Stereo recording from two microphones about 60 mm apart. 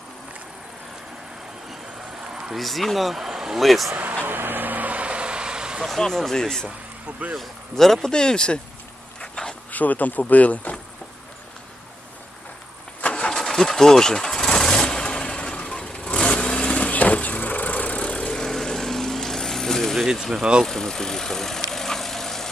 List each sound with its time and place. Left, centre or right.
2.3 s a sound: centre
2.6 s speech: centre
3.9 s speech: right
4.2 s vehicle: right; by 5.8 s centre
5.8 s speech: centre
9.2 s a sound: centre
9.7 s speech: left
13.0 s vehicle: centre
20.1 s speech: centre
20.7 s speech: centre
21.7 s vehicle: centre